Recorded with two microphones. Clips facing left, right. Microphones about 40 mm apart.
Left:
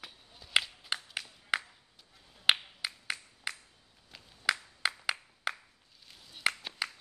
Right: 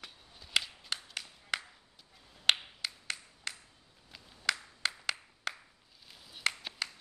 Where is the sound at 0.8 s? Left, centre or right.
Centre.